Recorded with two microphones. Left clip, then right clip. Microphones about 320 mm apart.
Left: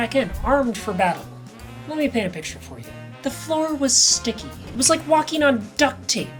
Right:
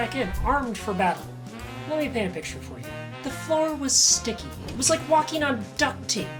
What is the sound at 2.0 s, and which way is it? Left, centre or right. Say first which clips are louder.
A woman's voice: left 5 dB; left.